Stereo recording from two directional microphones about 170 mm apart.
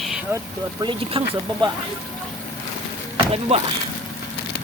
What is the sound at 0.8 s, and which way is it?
Speech, 30° right (ahead or behind).